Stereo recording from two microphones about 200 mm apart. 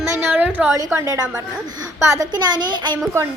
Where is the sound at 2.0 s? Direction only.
15° right (ahead or behind).